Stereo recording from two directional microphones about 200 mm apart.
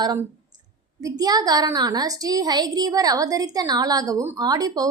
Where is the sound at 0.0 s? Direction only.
20° right (ahead or behind).